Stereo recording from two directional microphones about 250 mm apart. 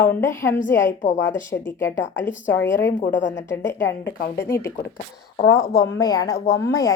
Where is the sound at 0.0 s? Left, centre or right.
Centre.